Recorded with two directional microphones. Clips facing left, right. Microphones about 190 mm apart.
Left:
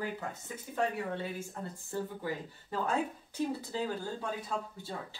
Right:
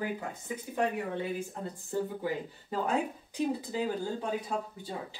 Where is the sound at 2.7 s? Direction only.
15° right (ahead or behind).